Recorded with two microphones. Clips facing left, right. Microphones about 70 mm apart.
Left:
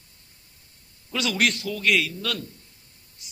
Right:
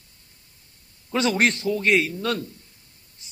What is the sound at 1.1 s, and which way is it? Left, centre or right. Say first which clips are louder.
A man's voice: right 4 dB; right.